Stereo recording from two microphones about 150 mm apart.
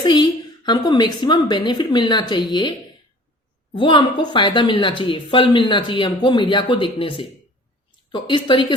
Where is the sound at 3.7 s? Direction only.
30° left (ahead or behind).